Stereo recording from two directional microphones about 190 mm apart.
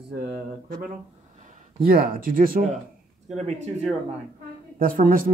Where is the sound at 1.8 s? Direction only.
50° right (ahead or behind).